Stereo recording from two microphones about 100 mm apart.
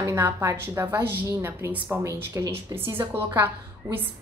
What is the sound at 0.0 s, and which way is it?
Speech, 25° right (ahead or behind).